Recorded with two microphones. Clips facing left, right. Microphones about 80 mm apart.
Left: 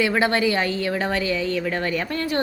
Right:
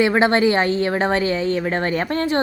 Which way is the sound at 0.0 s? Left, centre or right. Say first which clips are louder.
Right 4 dB; right.